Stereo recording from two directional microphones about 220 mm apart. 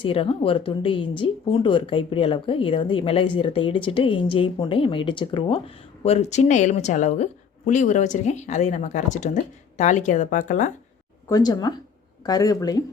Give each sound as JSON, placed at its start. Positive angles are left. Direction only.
{"t": 0.0, "sound": "speech", "side_deg": 25}
{"t": 11.3, "sound": "speech", "side_deg": 15}